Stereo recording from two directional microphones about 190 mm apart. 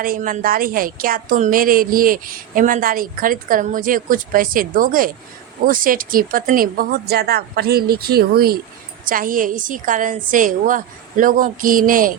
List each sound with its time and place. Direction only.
0.0 s a woman's voice: 45° right (ahead or behind)